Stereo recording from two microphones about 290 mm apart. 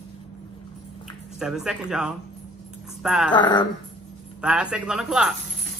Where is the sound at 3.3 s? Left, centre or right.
Centre.